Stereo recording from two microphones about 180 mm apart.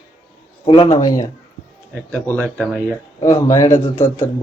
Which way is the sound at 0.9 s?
20° left (ahead or behind).